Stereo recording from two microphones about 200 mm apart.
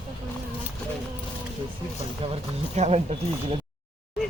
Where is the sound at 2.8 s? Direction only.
30° right (ahead or behind).